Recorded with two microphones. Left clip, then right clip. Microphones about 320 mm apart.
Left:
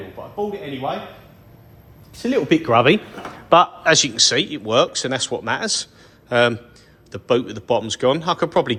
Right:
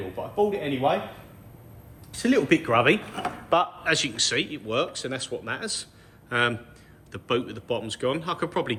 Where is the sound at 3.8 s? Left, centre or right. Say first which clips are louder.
Left 9 dB; centre.